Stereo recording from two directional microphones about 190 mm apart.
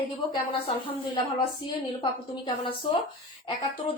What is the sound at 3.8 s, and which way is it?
Speech, 35° left (ahead or behind).